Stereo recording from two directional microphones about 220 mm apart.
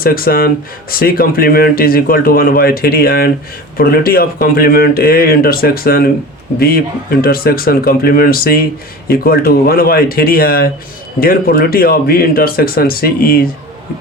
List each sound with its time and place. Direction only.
0.0 s speech: 40° left (ahead or behind)